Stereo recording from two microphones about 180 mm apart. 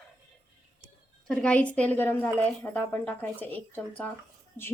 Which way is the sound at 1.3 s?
5° left (ahead or behind).